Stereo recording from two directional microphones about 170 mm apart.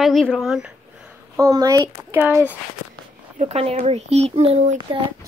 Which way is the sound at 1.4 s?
20° right (ahead or behind).